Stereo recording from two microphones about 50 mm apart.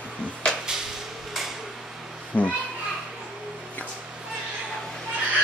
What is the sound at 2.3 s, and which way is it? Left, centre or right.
Children playing, left.